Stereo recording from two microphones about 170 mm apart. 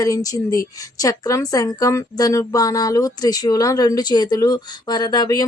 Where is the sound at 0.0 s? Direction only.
20° left (ahead or behind).